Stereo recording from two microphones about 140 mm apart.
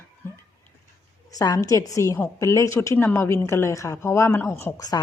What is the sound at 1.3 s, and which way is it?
A woman's voice, 25° left (ahead or behind).